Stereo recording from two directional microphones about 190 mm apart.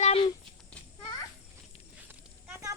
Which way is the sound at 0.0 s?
30° left (ahead or behind).